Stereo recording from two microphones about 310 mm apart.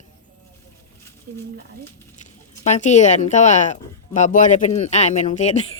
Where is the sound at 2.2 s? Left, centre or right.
Left.